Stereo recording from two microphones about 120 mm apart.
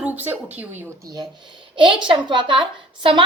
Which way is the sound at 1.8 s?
45° right (ahead or behind).